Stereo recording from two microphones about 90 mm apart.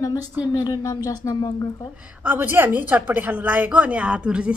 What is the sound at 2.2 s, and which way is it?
A woman's voice, 20° right (ahead or behind).